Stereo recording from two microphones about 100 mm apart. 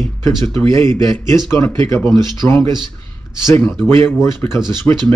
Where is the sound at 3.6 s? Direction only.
15° left (ahead or behind).